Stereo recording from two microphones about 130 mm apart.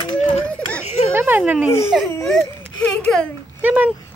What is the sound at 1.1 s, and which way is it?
Speech, 15° right (ahead or behind).